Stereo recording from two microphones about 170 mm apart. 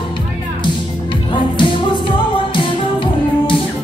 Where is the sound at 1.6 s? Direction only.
30° left (ahead or behind).